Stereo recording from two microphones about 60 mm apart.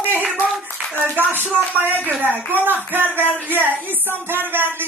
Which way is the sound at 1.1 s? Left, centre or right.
Right.